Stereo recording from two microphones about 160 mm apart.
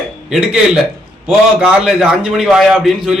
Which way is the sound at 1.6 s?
Centre (ahead or behind).